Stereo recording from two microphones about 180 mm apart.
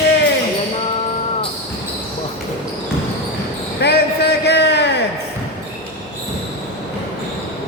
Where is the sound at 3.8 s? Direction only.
65° left (ahead or behind).